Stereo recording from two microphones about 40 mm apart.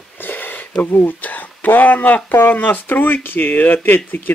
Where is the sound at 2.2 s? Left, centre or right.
Left.